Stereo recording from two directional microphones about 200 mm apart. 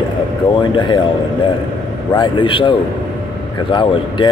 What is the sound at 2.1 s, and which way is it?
Speech, 25° left (ahead or behind).